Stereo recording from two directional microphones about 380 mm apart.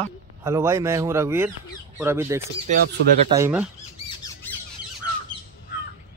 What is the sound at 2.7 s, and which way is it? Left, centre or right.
Speech, centre.